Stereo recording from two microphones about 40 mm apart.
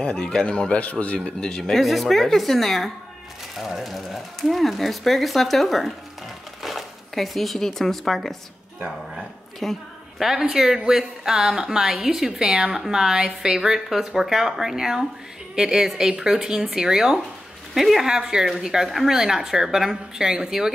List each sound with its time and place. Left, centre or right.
0.0 s speech: left
1.6 s speech: centre
9.6 s a sound: centre
10.2 s speech: centre
18.0 s speech: centre